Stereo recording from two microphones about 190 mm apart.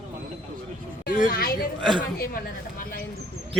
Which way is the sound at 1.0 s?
50° left (ahead or behind).